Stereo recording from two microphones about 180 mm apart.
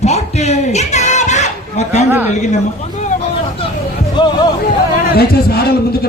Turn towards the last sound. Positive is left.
turn(degrees=60)  # may be behind; listen again after turning